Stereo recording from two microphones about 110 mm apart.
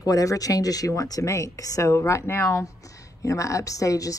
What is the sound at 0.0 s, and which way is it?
Speech, 35° left (ahead or behind).